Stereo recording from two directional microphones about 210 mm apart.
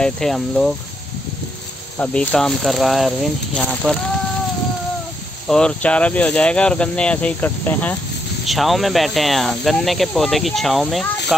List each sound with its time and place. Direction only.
0.0 s speech: centre (ahead or behind)
2.0 s speech: 5° left (ahead or behind)
5.5 s speech: 5° left (ahead or behind)